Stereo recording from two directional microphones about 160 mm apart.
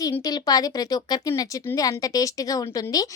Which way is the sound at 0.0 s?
25° left (ahead or behind).